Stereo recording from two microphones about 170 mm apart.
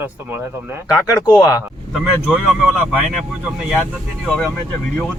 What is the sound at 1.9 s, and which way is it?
A man's voice, 5° right (ahead or behind).